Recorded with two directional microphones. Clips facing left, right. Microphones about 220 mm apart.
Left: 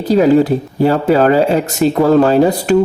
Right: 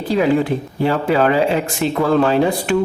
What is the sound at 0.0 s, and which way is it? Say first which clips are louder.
Speech: left 6 dB; 40° left (ahead or behind).